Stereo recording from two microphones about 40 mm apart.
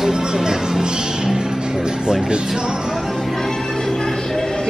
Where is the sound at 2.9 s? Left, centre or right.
Centre.